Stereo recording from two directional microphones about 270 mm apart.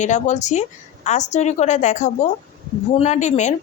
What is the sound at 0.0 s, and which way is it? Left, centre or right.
Speech, left.